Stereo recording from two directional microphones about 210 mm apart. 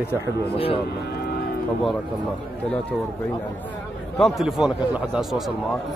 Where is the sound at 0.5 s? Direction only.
25° left (ahead or behind).